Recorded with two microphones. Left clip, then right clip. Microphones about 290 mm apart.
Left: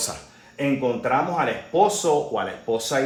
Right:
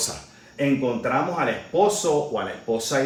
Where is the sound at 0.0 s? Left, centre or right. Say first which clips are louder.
Even; centre.